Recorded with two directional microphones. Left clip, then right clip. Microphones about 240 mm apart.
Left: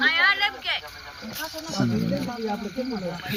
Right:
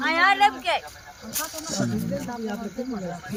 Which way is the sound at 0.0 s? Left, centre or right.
Right.